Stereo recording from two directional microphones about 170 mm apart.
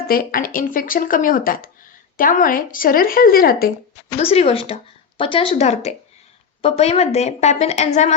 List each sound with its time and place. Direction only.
0.1 s speech: 60° left (ahead or behind)
4.2 s speech: 35° left (ahead or behind)